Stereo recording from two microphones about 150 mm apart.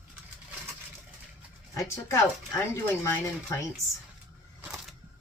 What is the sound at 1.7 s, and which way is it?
Speech, 20° left (ahead or behind).